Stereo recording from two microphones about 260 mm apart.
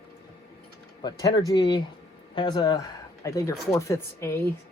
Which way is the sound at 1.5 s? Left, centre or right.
Centre.